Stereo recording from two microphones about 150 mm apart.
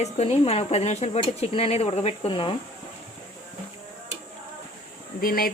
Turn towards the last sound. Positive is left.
turn(degrees=80)